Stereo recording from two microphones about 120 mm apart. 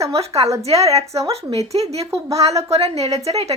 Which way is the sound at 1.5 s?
60° right (ahead or behind).